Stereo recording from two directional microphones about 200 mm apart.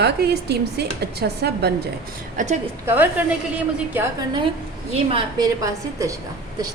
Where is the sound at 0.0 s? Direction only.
55° right (ahead or behind).